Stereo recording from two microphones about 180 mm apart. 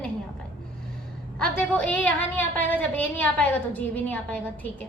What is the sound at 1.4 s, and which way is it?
A woman's voice, 5° left (ahead or behind).